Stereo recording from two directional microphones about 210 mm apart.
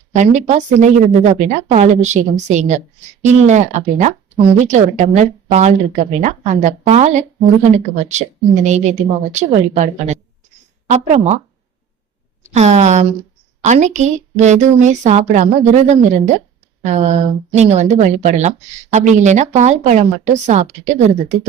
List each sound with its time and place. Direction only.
0.1 s a woman's voice: 35° right (ahead or behind)
12.4 s a woman's voice: 35° right (ahead or behind)